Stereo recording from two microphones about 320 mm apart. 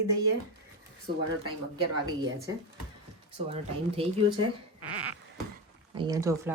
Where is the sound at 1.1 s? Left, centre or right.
Right.